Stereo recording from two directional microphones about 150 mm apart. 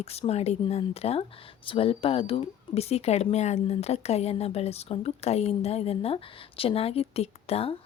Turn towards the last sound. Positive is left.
turn(degrees=40)  # may be behind; listen again after turning